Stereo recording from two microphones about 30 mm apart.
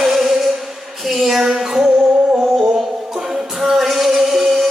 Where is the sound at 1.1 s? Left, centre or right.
Centre.